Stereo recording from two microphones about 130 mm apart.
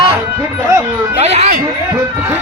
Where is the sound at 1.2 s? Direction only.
55° right (ahead or behind).